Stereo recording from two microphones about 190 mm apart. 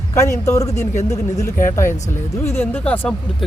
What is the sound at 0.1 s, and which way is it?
Speech, 15° left (ahead or behind).